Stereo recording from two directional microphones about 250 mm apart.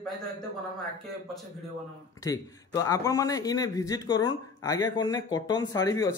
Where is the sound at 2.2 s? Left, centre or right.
Centre.